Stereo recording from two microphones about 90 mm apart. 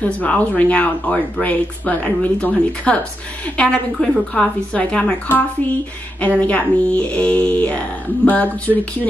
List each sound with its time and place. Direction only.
0.0 s speech: 15° left (ahead or behind)